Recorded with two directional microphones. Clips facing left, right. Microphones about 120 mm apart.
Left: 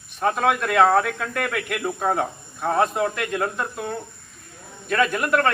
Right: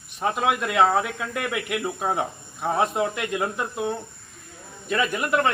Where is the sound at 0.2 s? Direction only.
15° right (ahead or behind).